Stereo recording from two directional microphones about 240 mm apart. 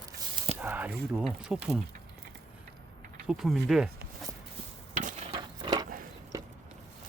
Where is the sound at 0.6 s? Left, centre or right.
Centre.